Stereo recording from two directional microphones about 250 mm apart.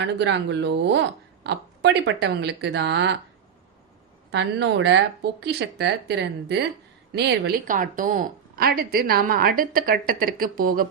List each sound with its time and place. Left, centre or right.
0.0 s speech: right
4.3 s a woman's voice: right